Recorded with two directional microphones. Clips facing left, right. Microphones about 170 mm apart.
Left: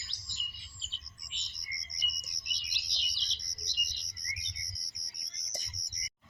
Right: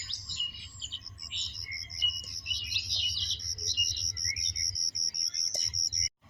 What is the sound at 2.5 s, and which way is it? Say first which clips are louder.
Bird: right 2 dB; 60° right (ahead or behind).